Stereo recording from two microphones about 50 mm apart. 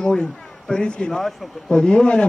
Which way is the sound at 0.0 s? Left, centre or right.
Centre.